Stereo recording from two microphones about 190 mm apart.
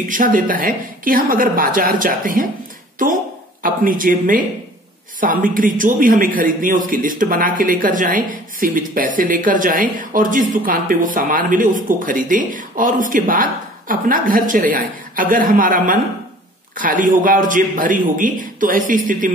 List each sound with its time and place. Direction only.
0.1 s a woman's voice: 45° right (ahead or behind)